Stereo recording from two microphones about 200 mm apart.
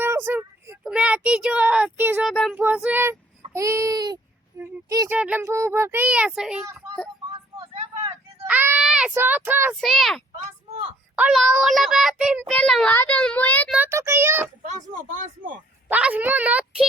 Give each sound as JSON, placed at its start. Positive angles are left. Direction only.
{"t": 0.0, "sound": "speech", "side_deg": -10}
{"t": 2.3, "sound": "a child's voice", "side_deg": 5}
{"t": 2.6, "sound": "speech", "side_deg": -5}
{"t": 7.6, "sound": "vehicle", "side_deg": -30}
{"t": 8.4, "sound": "a child's voice", "side_deg": -10}
{"t": 9.8, "sound": "a child's voice", "side_deg": 0}
{"t": 13.7, "sound": "speech", "side_deg": -10}
{"t": 14.6, "sound": "speech", "side_deg": -35}
{"t": 15.9, "sound": "speech", "side_deg": -5}